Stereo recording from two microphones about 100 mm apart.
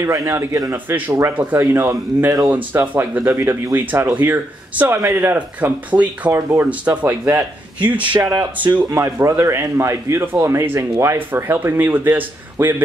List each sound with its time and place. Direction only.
0.0 s speech: 30° right (ahead or behind)
0.9 s speech: 20° right (ahead or behind)
7.8 s speech: 50° right (ahead or behind)
8.3 s speech: 15° right (ahead or behind)
8.9 s speech: 30° right (ahead or behind)